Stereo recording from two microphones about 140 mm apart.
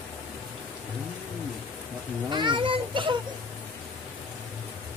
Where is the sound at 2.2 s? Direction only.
35° right (ahead or behind).